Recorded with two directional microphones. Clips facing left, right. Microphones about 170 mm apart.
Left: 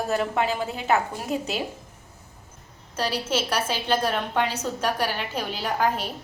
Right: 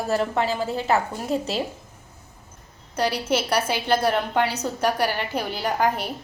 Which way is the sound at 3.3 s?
10° right (ahead or behind).